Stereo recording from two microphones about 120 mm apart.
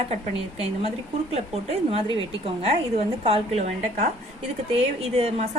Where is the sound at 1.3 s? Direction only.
60° right (ahead or behind).